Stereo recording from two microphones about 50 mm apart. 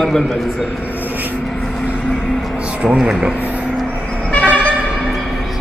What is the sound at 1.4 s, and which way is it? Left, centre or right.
Vehicle, centre.